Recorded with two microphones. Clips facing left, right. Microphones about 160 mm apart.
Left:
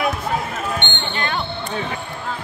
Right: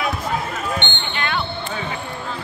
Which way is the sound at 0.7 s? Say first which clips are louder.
Left 1 dB; 40° left (ahead or behind).